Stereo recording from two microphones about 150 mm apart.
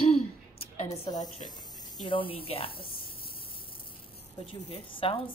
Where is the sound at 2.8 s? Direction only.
80° left.